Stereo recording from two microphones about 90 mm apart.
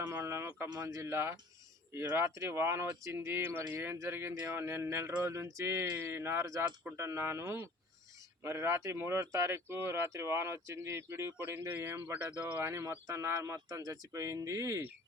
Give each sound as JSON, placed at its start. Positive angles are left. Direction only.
{"t": 0.1, "sound": "speech", "side_deg": -30}
{"t": 12.6, "sound": "speech", "side_deg": -30}